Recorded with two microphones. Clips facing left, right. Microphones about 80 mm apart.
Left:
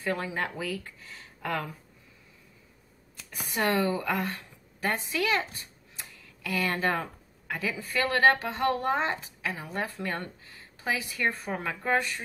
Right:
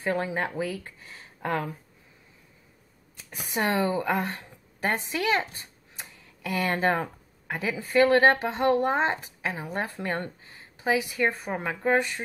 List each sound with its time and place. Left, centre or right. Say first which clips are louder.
0.0 s speech: right 3 dB; right
3.3 s speech: right 1 dB; right